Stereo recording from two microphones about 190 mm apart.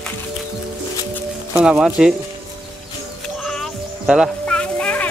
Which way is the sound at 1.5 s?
5° right (ahead or behind).